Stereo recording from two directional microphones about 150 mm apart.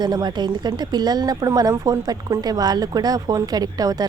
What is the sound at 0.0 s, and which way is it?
Speech, 25° right (ahead or behind).